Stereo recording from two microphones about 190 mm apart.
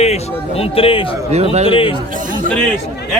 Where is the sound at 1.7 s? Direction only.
30° left (ahead or behind).